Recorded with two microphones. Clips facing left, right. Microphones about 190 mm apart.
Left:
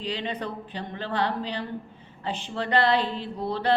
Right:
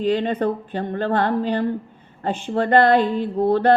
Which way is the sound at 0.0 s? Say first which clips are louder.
Right 11 dB; 50° right (ahead or behind).